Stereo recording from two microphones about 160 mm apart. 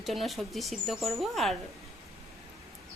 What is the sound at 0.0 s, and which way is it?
A woman's voice, centre (ahead or behind).